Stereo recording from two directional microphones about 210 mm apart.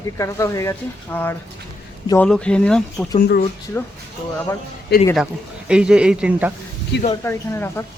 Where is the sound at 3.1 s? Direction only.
45° left (ahead or behind).